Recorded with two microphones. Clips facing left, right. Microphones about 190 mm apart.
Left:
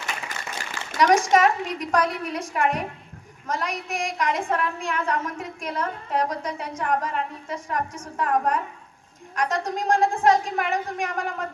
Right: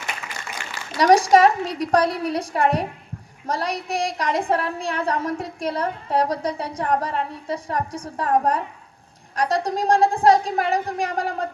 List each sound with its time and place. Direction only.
0.9 s a woman's voice: 35° right (ahead or behind)